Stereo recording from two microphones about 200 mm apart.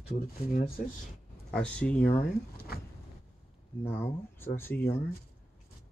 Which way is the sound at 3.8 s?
10° left (ahead or behind).